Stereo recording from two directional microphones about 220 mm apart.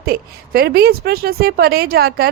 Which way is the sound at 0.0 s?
45° right (ahead or behind).